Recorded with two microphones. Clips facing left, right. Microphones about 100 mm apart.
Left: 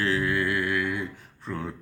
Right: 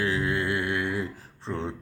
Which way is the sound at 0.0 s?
20° right (ahead or behind).